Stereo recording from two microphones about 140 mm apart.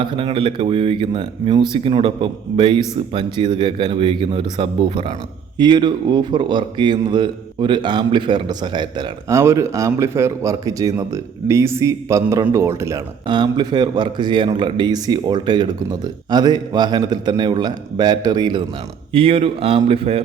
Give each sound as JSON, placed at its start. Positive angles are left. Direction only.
{"t": 0.0, "sound": "speech", "side_deg": -35}
{"t": 9.3, "sound": "speech", "side_deg": -20}
{"t": 13.2, "sound": "speech", "side_deg": -35}